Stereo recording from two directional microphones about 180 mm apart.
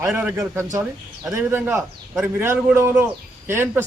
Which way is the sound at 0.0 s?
10° right (ahead or behind).